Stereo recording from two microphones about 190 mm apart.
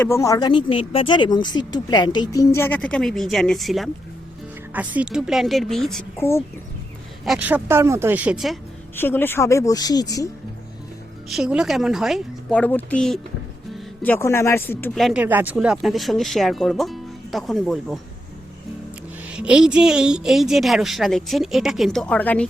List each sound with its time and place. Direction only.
0.0 s a woman's voice: 15° left (ahead or behind)
6.1 s a woman's voice: 15° left (ahead or behind)
7.3 s speech: 10° right (ahead or behind)
9.0 s a woman's voice: 10° left (ahead or behind)
11.3 s a woman's voice: 5° right (ahead or behind)
15.2 s a woman's voice: 10° right (ahead or behind)
19.3 s a woman's voice: 5° right (ahead or behind)